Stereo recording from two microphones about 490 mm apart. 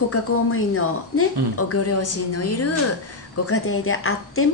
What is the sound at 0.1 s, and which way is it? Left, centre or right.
A woman's voice, left.